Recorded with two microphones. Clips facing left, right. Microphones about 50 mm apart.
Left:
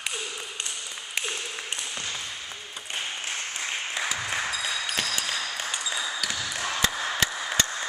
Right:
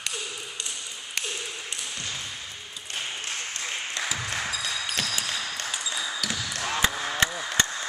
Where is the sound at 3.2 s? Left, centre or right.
Centre.